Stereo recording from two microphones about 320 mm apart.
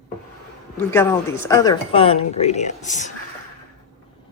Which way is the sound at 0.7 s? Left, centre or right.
Centre.